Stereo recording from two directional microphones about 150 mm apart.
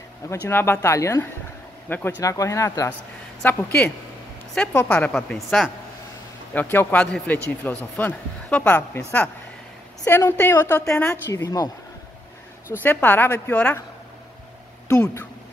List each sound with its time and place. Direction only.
0.3 s speech: 15° left (ahead or behind)
10.0 s speech: 15° left (ahead or behind)
11.2 s speech: 25° left (ahead or behind)
12.8 s speech: 10° left (ahead or behind)
14.9 s speech: 15° left (ahead or behind)